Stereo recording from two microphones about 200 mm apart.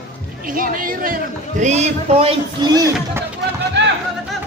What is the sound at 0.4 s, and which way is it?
A man's voice, 45° right (ahead or behind).